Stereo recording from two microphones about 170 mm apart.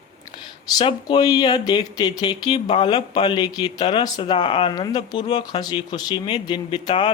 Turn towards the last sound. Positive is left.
turn(degrees=30)  # may be behind; listen again after turning